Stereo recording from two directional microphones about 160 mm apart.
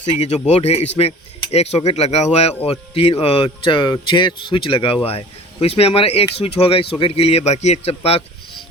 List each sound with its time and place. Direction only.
0.0 s speech: 40° left (ahead or behind)